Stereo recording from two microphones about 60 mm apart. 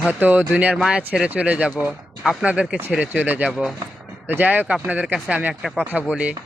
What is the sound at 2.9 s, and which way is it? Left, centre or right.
Speech, right.